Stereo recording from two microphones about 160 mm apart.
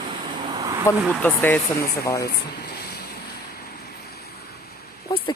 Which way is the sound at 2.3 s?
85° left.